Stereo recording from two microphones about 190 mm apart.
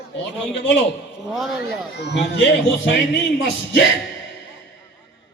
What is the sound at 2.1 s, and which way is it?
A man's voice, 65° left (ahead or behind).